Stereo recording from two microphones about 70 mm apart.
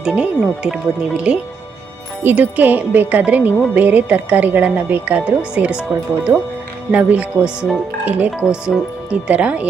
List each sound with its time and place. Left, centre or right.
0.0 s a woman's voice: centre
6.9 s a woman's voice: right